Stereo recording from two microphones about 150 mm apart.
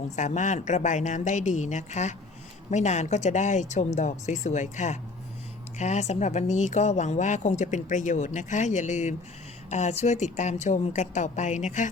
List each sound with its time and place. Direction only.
0.2 s speech: 55° left (ahead or behind)